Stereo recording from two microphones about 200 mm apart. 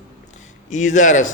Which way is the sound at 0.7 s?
40° left (ahead or behind).